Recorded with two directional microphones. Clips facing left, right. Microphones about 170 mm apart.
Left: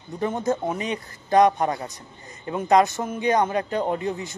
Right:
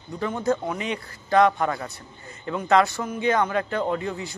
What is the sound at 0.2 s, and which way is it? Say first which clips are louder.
A man's voice: left 1 dB; 20° left (ahead or behind).